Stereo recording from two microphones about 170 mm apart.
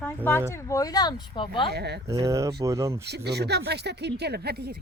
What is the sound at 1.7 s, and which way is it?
Speech, 75° right (ahead or behind).